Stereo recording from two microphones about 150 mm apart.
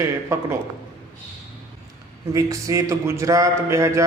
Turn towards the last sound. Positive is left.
turn(degrees=-20)  # may be behind; listen again after turning